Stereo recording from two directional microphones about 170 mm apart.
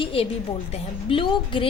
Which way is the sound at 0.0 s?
35° left (ahead or behind).